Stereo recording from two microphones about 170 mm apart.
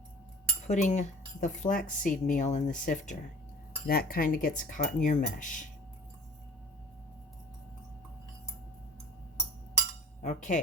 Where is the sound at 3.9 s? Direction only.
60° left (ahead or behind).